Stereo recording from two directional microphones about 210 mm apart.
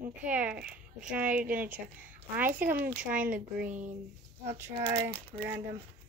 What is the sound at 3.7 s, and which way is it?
Speech, 35° right (ahead or behind).